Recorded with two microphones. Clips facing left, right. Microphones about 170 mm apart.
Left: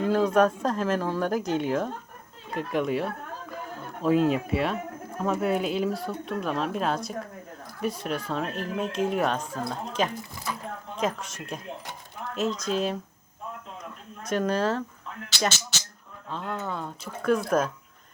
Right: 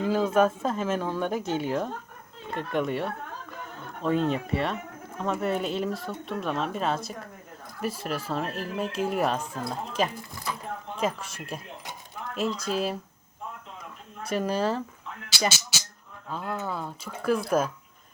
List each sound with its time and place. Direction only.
0.0 s speech: 5° right (ahead or behind)
14.2 s speech: 5° right (ahead or behind)